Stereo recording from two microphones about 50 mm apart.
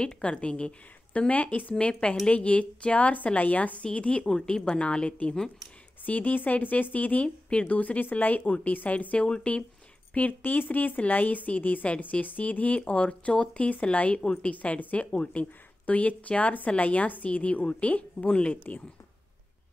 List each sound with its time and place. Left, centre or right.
0.0 s a woman's voice: left
4.3 s a woman's voice: centre
6.0 s speech: left
7.2 s speech: centre
7.6 s a woman's voice: left
10.1 s a woman's voice: left